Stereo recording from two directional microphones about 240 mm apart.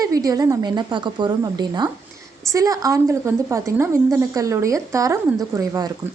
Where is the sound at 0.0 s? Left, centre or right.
Centre.